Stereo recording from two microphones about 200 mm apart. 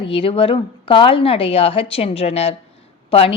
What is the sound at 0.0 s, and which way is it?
A woman's voice, 25° left (ahead or behind).